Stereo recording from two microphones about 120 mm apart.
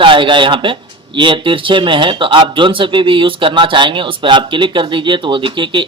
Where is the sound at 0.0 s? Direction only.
45° right (ahead or behind).